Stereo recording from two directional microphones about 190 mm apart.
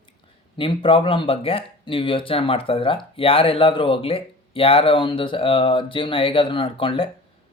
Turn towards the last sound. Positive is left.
turn(degrees=25)  # may be behind; listen again after turning